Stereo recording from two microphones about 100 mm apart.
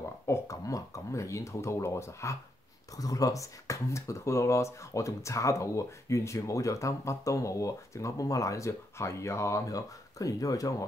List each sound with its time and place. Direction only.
0.3 s speech: 35° left (ahead or behind)